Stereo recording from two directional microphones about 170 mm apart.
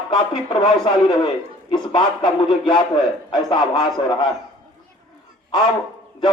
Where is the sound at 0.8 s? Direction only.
30° left (ahead or behind).